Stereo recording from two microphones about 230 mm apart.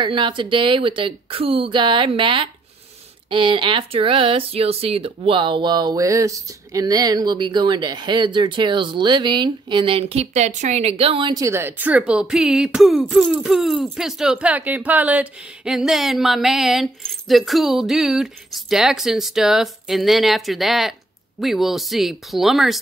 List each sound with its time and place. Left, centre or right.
0.0 s speech: right; by 22.8 s centre